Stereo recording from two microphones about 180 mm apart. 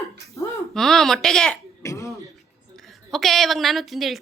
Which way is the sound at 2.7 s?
Centre (ahead or behind).